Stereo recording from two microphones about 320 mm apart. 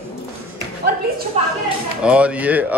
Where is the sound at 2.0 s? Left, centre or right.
Centre.